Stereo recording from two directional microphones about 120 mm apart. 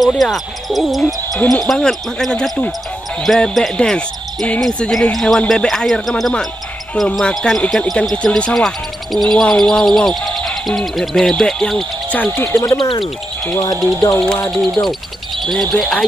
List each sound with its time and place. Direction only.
0.0 s speech: centre (ahead or behind)
12.5 s speech: 35° left (ahead or behind)
13.7 s speech: centre (ahead or behind)